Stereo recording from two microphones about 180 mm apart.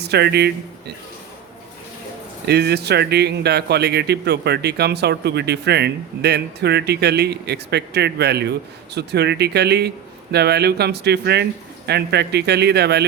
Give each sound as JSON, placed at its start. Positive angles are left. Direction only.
{"t": 0.0, "sound": "speech", "side_deg": -65}
{"t": 2.5, "sound": "speech", "side_deg": -65}